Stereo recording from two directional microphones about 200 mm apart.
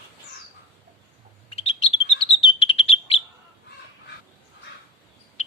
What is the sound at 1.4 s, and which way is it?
Bird, 30° left (ahead or behind).